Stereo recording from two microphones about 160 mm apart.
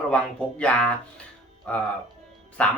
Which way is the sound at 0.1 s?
5° left (ahead or behind).